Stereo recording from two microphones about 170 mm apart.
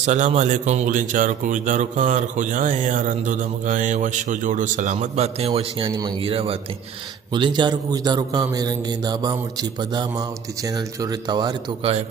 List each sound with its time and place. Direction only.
0.0 s a man's voice: 45° right (ahead or behind); by 11.5 s 25° right (ahead or behind)